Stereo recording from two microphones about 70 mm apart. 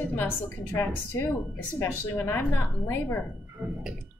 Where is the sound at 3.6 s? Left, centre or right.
Centre.